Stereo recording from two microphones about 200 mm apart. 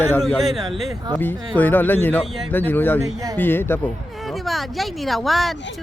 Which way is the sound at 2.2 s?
Centre (ahead or behind).